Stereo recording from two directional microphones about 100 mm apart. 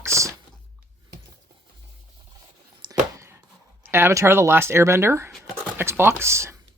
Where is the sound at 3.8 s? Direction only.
25° right (ahead or behind).